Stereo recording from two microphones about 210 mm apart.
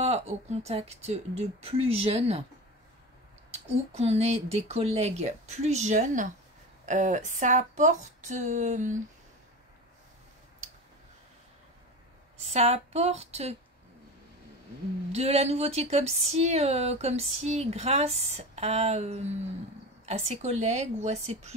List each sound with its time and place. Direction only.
0.0 s speech: 30° right (ahead or behind)
3.9 s speech: 30° right (ahead or behind)
12.4 s speech: 30° right (ahead or behind)
15.1 s speech: 30° right (ahead or behind)